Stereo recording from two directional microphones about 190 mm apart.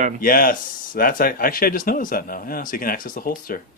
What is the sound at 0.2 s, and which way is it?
Speech, 50° left (ahead or behind).